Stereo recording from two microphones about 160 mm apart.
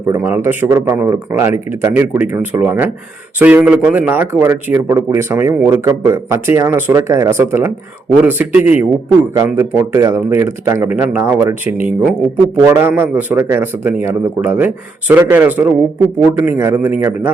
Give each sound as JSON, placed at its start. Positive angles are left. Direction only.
{"t": 0.0, "sound": "speech", "side_deg": -15}